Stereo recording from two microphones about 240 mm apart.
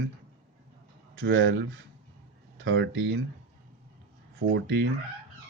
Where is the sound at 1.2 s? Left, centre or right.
Right.